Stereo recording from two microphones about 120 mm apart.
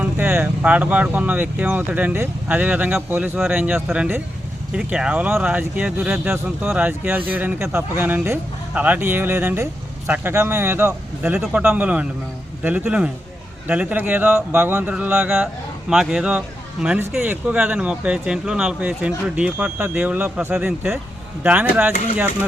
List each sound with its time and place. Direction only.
0.0 s speech: 15° right (ahead or behind)